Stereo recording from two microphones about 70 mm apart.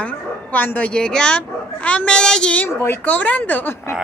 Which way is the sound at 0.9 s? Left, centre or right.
Centre.